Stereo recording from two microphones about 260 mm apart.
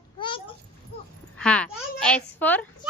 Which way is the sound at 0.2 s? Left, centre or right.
Centre.